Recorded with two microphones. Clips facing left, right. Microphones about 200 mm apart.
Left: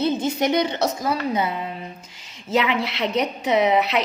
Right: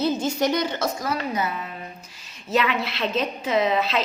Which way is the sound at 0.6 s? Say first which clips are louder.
Left 3 dB; 65° left (ahead or behind).